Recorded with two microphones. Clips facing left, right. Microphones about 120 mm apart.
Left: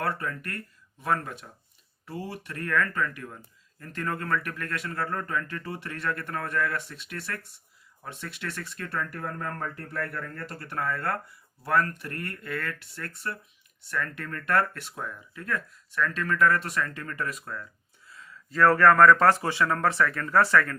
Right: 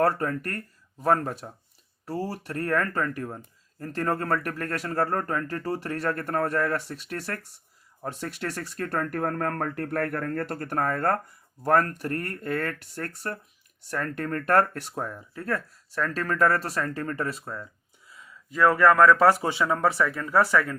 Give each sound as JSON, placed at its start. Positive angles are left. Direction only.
{"t": 0.0, "sound": "speech", "side_deg": -40}
{"t": 18.1, "sound": "speech", "side_deg": -15}